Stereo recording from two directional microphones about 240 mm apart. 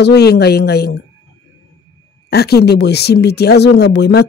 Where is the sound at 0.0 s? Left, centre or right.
Left.